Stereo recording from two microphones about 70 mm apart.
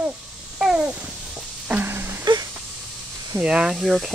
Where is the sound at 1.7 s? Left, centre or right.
Right.